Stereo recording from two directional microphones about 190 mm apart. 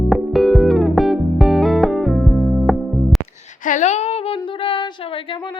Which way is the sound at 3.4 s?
40° left (ahead or behind).